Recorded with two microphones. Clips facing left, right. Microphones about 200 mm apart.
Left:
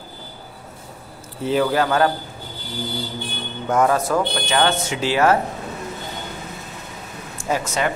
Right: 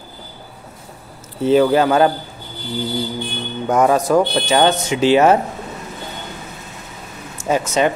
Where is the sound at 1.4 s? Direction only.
25° right (ahead or behind).